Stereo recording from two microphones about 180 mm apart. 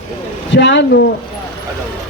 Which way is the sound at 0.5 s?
75° left (ahead or behind).